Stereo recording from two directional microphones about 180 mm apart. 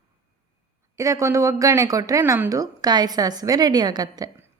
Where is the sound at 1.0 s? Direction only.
15° right (ahead or behind).